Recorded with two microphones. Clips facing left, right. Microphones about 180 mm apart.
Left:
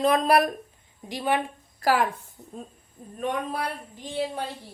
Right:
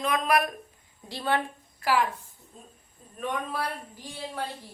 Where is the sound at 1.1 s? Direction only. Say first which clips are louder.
Left 2 dB; 15° left (ahead or behind).